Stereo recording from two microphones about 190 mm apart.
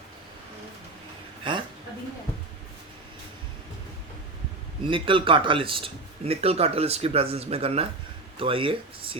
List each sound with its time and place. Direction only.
4.8 s a man's voice: 25° right (ahead or behind)